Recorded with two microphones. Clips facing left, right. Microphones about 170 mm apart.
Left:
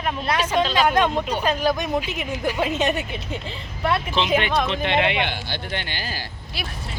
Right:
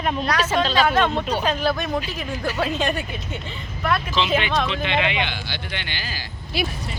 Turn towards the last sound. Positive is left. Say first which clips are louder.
# right 8 dB
turn(degrees=0)  # may be behind; listen again after turning